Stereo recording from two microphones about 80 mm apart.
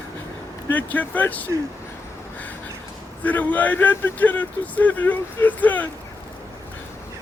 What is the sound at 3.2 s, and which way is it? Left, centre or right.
Speech, left.